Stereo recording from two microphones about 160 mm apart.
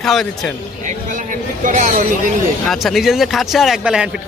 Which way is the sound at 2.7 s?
Centre (ahead or behind).